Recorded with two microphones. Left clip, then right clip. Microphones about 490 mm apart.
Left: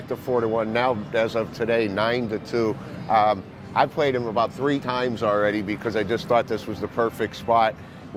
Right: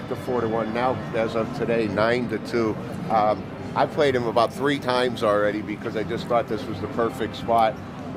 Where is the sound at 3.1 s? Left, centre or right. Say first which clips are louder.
Left 2 dB; left.